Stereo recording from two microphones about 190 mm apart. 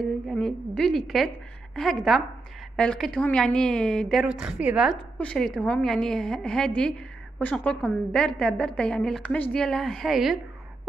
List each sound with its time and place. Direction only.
0.0 s a woman's voice: centre (ahead or behind)